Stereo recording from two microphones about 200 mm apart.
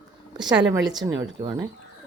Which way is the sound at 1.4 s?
15° right (ahead or behind).